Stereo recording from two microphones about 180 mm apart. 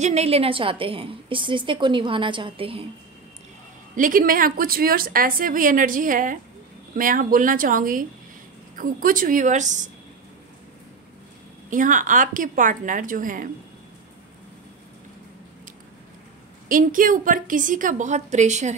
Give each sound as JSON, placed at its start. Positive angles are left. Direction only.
{"t": 0.0, "sound": "a woman's voice", "side_deg": -35}
{"t": 3.9, "sound": "a woman's voice", "side_deg": -50}
{"t": 11.7, "sound": "a woman's voice", "side_deg": -45}
{"t": 16.6, "sound": "a woman's voice", "side_deg": -50}